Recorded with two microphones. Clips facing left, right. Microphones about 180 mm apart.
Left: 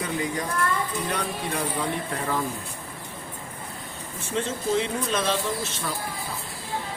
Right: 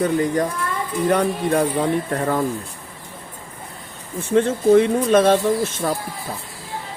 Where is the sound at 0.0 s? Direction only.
50° right (ahead or behind).